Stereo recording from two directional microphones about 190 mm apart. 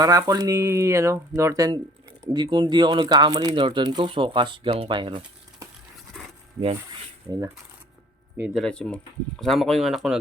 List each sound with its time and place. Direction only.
0.0 s speech: 20° right (ahead or behind)
6.2 s dog: centre (ahead or behind)
8.4 s speech: centre (ahead or behind)